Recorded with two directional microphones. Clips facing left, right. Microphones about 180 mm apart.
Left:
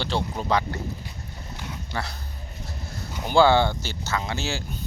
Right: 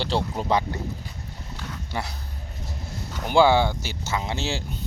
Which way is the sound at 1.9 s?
15° right (ahead or behind).